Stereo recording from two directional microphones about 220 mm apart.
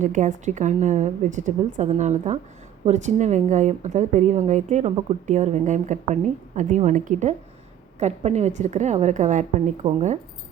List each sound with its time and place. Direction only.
0.0 s a woman's voice: 35° right (ahead or behind)